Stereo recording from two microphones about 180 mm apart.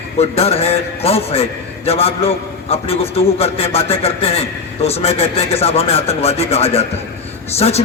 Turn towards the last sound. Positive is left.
turn(degrees=35)  # may be behind; listen again after turning